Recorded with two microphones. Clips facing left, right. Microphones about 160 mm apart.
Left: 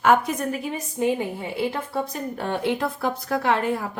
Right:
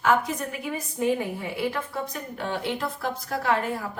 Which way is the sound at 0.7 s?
25° left (ahead or behind).